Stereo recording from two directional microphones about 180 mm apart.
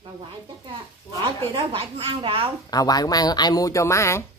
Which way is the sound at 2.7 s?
20° left (ahead or behind).